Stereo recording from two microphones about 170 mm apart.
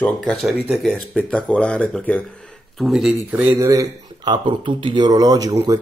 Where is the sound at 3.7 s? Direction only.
25° right (ahead or behind).